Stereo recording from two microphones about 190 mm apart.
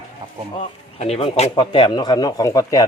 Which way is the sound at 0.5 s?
35° left (ahead or behind).